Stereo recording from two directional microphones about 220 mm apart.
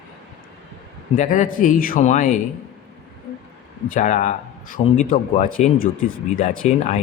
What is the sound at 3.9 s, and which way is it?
A man's voice, 35° left (ahead or behind).